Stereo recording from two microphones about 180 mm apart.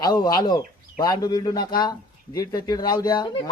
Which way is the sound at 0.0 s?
20° left (ahead or behind).